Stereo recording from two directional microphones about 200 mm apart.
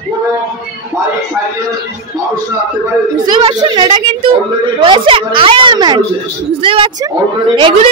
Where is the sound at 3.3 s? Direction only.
20° right (ahead or behind).